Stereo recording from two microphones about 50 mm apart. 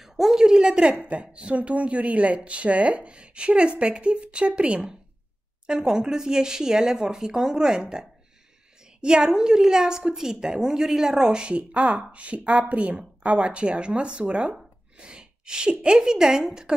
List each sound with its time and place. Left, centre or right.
0.0 s a woman's voice: centre
8.8 s a sound: centre
9.3 s a woman's voice: centre